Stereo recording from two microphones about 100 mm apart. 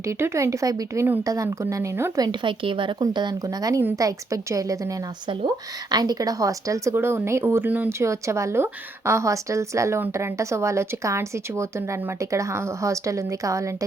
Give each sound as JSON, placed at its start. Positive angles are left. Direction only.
{"t": 0.0, "sound": "a woman's voice", "side_deg": -30}
{"t": 2.4, "sound": "a woman's voice", "side_deg": -55}
{"t": 5.9, "sound": "a woman's voice", "side_deg": -40}
{"t": 7.9, "sound": "a woman's voice", "side_deg": -30}